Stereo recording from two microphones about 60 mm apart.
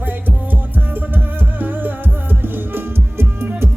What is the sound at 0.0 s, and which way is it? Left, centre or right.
Music, right.